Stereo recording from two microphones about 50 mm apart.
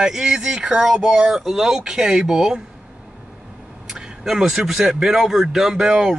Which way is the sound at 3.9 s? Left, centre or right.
Centre.